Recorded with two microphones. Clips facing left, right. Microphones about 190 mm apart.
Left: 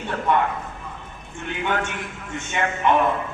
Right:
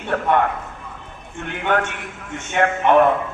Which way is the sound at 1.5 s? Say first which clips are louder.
Right 4 dB; 60° right (ahead or behind).